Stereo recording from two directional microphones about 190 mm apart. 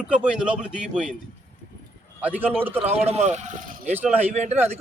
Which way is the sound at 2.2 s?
10° right (ahead or behind).